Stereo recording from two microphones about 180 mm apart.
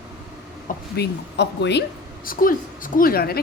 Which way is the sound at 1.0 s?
70° left (ahead or behind).